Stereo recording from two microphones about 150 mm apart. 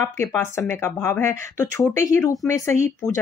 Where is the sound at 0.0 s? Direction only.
15° left (ahead or behind).